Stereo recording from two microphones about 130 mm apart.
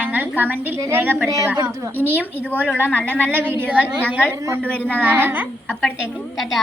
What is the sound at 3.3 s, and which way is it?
A woman's voice, 15° right (ahead or behind).